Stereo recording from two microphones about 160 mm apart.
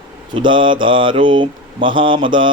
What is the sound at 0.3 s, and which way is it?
Speech, 30° right (ahead or behind).